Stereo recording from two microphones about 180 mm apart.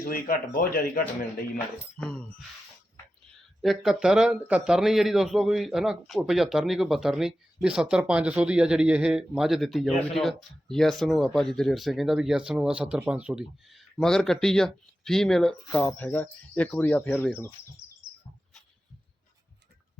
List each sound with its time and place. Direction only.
0.0 s speech: 55° left (ahead or behind)
2.0 s speech: 5° left (ahead or behind)
3.6 s speech: centre (ahead or behind)